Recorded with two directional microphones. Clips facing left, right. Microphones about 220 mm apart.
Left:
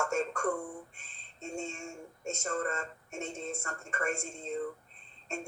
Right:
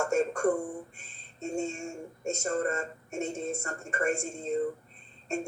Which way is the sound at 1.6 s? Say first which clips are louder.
Right 6 dB; 45° right (ahead or behind).